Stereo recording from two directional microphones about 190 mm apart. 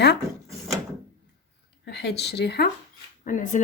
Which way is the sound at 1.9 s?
60° left (ahead or behind).